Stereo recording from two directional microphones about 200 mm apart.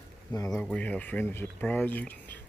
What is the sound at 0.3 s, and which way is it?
Speech, 15° left (ahead or behind).